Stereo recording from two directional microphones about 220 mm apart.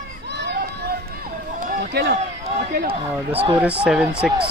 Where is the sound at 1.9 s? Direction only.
50° right (ahead or behind).